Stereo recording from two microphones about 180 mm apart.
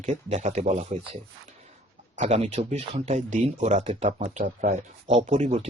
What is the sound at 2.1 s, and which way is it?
Speech, 40° right (ahead or behind).